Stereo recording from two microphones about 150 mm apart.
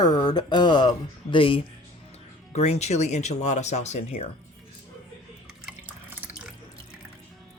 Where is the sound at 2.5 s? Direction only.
45° left (ahead or behind).